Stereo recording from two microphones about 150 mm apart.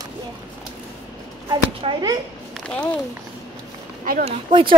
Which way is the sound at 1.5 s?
30° right (ahead or behind).